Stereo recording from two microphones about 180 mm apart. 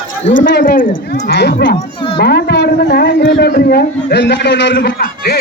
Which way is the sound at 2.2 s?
65° left (ahead or behind).